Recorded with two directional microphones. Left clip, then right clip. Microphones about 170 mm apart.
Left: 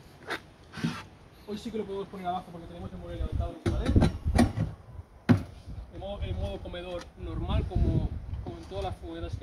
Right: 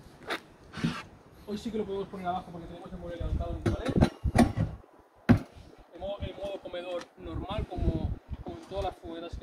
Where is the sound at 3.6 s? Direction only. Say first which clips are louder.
Even; 5° right (ahead or behind).